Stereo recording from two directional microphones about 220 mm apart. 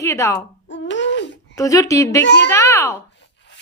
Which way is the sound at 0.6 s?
55° left (ahead or behind).